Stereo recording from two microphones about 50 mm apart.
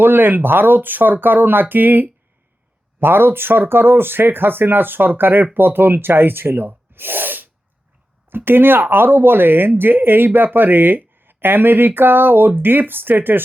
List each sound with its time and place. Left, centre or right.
0.0 s speech: right